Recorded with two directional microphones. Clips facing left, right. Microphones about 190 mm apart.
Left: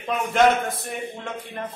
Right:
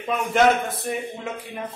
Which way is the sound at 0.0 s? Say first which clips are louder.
Even; centre (ahead or behind).